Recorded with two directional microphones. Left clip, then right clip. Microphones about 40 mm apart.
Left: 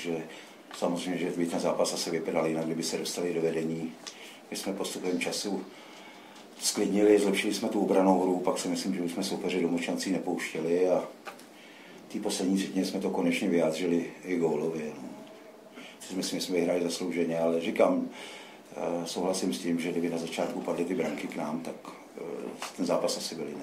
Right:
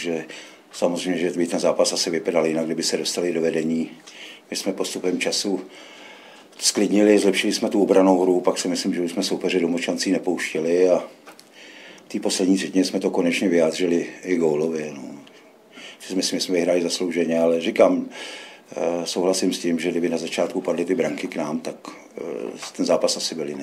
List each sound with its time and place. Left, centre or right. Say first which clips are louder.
0.0 s speech: right 8 dB; right
6.6 s speech: right 7 dB; right
12.1 s speech: right 9 dB; right
16.2 s speech: right 8 dB; right